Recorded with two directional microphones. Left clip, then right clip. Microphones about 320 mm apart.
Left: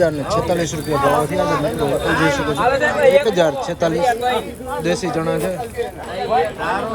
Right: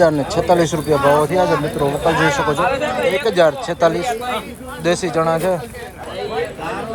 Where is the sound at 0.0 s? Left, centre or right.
Centre.